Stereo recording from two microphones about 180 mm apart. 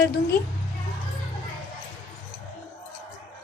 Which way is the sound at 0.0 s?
60° left (ahead or behind).